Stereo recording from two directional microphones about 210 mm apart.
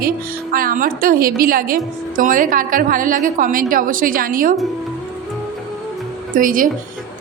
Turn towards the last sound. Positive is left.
turn(degrees=-40)  # may be behind; listen again after turning